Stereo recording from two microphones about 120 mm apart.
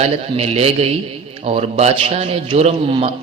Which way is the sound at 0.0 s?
60° right (ahead or behind).